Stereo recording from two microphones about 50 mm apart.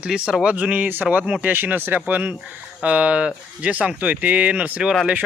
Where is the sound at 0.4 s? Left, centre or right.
Right.